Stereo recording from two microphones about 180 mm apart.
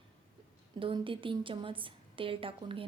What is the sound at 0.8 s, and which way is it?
A woman's voice, 30° right (ahead or behind).